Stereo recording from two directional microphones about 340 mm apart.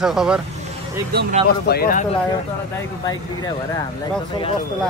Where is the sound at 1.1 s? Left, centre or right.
Right.